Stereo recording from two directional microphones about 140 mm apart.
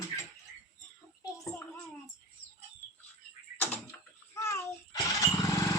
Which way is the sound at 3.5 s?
15° left (ahead or behind).